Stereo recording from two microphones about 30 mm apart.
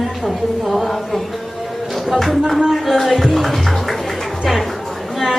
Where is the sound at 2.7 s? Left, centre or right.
Centre.